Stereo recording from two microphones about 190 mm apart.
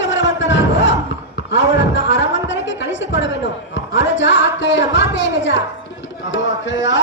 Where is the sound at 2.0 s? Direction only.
75° left (ahead or behind).